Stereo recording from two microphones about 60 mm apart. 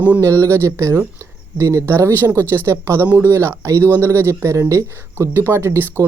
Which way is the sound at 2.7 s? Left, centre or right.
Right.